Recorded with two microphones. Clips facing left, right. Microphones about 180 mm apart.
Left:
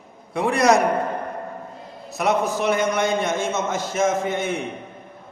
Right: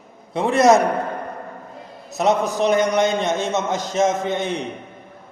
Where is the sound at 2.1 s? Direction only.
20° right (ahead or behind).